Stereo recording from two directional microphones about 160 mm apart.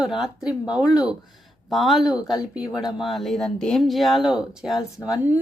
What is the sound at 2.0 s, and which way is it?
Speech, 25° left (ahead or behind).